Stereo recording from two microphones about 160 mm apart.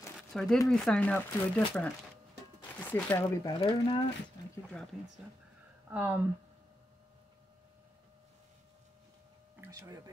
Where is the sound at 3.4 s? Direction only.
30° left (ahead or behind).